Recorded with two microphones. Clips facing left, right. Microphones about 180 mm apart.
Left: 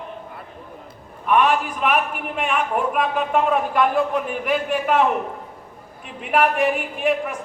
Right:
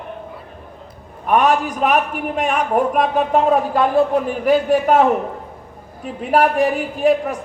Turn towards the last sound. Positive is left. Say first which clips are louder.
# right 5 dB
turn(degrees=-35)  # may be behind; listen again after turning